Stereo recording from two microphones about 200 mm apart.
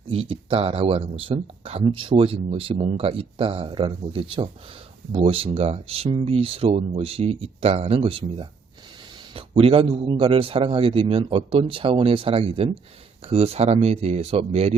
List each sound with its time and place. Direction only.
0.1 s a man's voice: 30° right (ahead or behind)